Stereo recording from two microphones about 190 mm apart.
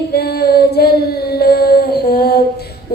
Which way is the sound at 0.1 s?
55° left (ahead or behind).